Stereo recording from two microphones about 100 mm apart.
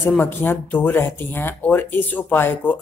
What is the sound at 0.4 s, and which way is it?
Speech, 20° left (ahead or behind).